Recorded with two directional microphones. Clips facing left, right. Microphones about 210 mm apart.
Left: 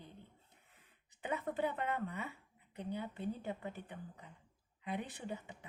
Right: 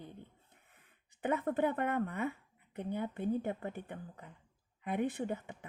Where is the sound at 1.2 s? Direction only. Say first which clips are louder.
Right 6 dB; 55° right (ahead or behind).